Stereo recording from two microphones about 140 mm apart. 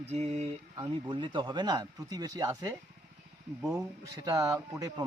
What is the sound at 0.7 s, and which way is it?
Speech, 35° right (ahead or behind).